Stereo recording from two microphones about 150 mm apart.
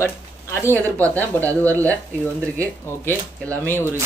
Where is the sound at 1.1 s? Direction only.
10° left (ahead or behind).